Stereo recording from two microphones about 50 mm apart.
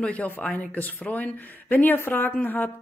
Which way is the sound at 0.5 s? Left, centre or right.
Left.